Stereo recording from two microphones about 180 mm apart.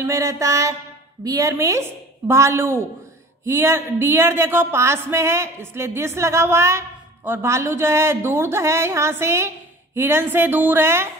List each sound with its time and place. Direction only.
0.0 s speech: 15° right (ahead or behind)